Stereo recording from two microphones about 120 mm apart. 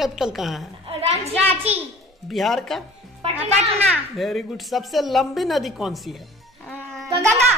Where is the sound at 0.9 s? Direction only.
60° right (ahead or behind).